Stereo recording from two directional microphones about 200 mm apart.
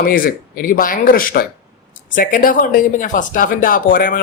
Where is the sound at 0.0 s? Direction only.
45° left (ahead or behind).